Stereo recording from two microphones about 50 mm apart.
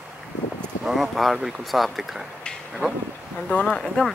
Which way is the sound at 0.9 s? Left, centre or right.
Centre.